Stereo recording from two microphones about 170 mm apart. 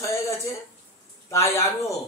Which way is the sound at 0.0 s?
15° left (ahead or behind).